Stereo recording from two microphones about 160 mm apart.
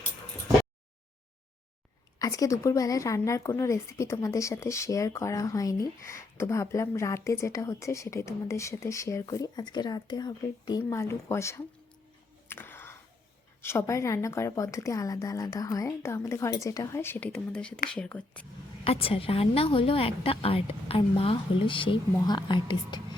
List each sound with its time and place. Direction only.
2.1 s a woman's voice: 20° left (ahead or behind)
12.5 s music: 15° left (ahead or behind)
13.6 s a woman's voice: 15° left (ahead or behind)
18.9 s a woman's voice: 35° left (ahead or behind)